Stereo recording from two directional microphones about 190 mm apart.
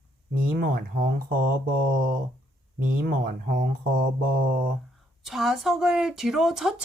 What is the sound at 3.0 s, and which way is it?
Speech, 50° right (ahead or behind).